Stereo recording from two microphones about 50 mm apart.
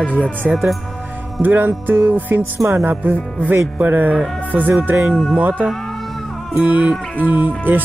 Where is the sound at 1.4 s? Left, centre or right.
Right.